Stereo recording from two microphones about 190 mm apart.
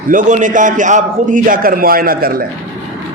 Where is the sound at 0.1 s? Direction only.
40° right (ahead or behind).